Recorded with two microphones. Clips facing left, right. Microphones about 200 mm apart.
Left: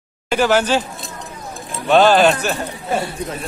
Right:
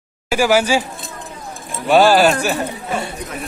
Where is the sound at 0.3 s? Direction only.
10° right (ahead or behind).